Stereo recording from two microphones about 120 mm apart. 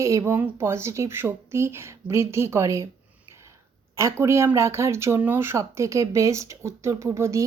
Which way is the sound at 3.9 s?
25° right (ahead or behind).